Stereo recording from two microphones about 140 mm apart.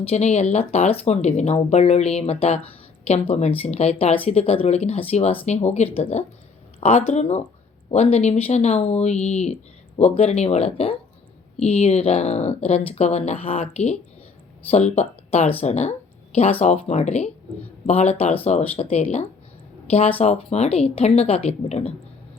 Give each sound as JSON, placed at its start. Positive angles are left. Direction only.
{"t": 0.0, "sound": "speech", "side_deg": 50}